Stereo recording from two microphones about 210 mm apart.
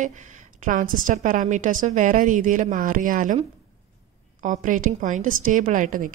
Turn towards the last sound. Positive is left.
turn(degrees=-40)  # may be behind; listen again after turning